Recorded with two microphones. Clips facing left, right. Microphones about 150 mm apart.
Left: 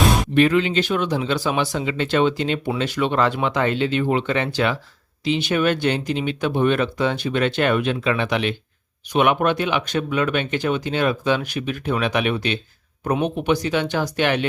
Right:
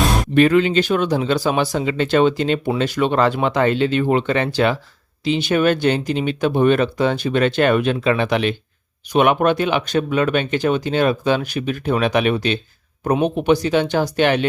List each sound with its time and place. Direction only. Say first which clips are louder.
0.3 s speech: right 5 dB; 45° right (ahead or behind)